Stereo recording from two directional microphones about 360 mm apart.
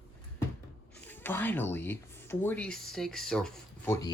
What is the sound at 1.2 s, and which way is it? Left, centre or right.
Speech, centre.